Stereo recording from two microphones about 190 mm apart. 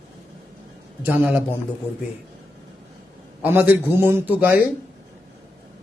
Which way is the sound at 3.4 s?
10° right (ahead or behind).